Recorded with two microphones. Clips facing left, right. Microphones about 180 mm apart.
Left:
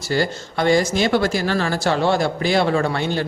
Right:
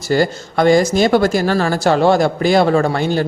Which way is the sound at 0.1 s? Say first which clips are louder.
Right 5 dB; 45° right (ahead or behind).